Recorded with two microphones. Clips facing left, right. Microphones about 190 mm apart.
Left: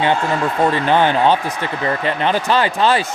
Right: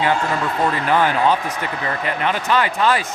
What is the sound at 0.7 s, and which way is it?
A man's voice, 25° left (ahead or behind).